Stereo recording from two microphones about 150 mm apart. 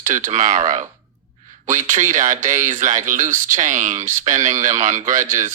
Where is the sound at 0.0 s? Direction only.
55° right (ahead or behind).